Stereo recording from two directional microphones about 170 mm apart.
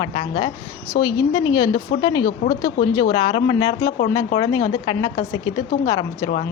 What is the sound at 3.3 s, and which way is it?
A woman's voice, 30° left (ahead or behind).